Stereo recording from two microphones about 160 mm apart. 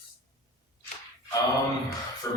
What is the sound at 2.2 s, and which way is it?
Speech, 20° left (ahead or behind).